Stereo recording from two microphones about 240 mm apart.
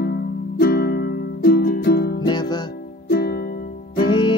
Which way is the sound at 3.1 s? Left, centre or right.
Left.